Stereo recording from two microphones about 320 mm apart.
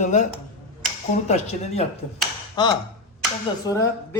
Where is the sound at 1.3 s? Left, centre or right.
Left.